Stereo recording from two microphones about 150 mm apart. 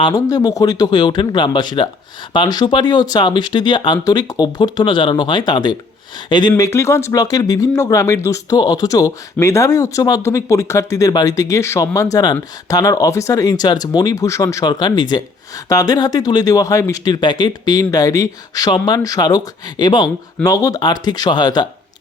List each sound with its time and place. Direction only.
0.0 s speech: 25° left (ahead or behind)
6.6 s speech: 20° left (ahead or behind)